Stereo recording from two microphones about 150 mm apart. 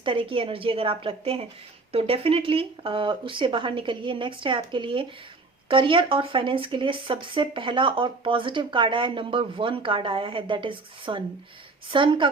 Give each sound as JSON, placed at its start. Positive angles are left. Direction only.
{"t": 0.0, "sound": "speech", "side_deg": -35}